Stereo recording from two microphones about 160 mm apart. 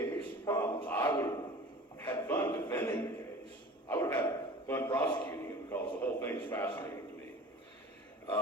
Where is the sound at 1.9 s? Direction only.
15° left (ahead or behind).